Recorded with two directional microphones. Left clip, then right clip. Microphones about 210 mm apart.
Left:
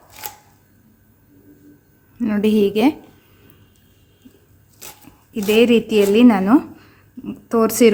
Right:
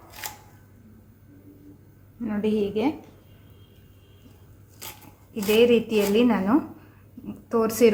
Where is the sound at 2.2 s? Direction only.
50° left (ahead or behind).